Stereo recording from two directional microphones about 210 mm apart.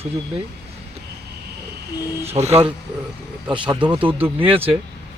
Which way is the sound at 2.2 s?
30° right (ahead or behind).